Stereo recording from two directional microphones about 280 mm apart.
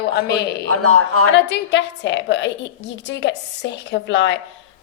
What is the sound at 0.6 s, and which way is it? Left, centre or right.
Speech, right.